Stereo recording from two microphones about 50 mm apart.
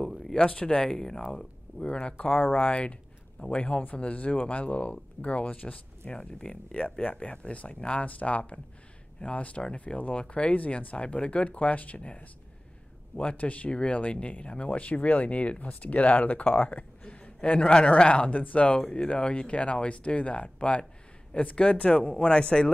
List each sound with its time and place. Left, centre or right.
0.0 s a sound: centre
0.4 s speech: left
1.3 s a sound: centre
1.9 s speech: left
6.1 s speech: centre
9.9 s speech: left
18.8 s speech: centre